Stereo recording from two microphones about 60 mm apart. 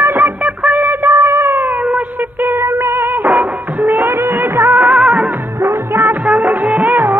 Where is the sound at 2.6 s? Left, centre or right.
Right.